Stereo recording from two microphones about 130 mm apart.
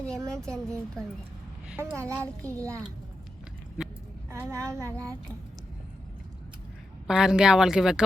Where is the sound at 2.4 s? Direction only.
25° right (ahead or behind).